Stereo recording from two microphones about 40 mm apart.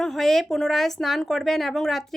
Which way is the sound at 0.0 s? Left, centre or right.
Centre.